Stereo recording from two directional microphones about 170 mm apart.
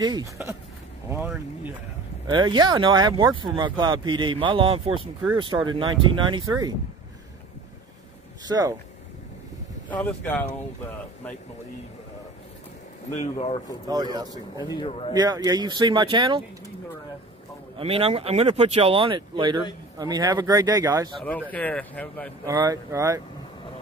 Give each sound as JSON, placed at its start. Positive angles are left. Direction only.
{"t": 0.0, "sound": "speech", "side_deg": -20}
{"t": 1.1, "sound": "speech", "side_deg": -10}
{"t": 2.3, "sound": "speech", "side_deg": -25}
{"t": 8.5, "sound": "speech", "side_deg": -20}
{"t": 9.8, "sound": "speech", "side_deg": 10}
{"t": 13.1, "sound": "speech", "side_deg": 40}
{"t": 13.8, "sound": "speech", "side_deg": -25}
{"t": 14.6, "sound": "a man's voice", "side_deg": 25}
{"t": 15.1, "sound": "speech", "side_deg": -20}
{"t": 17.7, "sound": "speech", "side_deg": -35}
{"t": 21.2, "sound": "speech", "side_deg": 10}
{"t": 22.5, "sound": "speech", "side_deg": -20}